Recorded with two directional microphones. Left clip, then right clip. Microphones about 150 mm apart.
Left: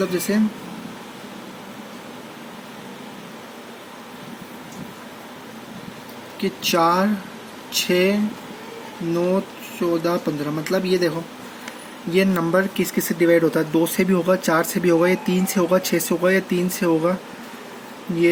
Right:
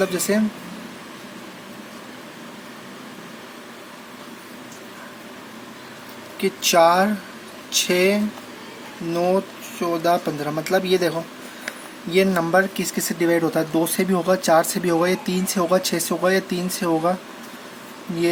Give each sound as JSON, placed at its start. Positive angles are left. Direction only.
{"t": 0.0, "sound": "speech", "side_deg": -30}
{"t": 6.4, "sound": "speech", "side_deg": -25}
{"t": 9.8, "sound": "speech", "side_deg": -25}
{"t": 12.1, "sound": "speech", "side_deg": -25}